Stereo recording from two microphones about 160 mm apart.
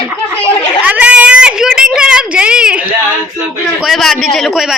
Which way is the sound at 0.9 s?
10° right (ahead or behind).